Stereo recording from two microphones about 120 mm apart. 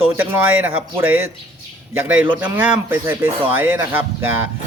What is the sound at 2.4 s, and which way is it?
Speech, 15° right (ahead or behind).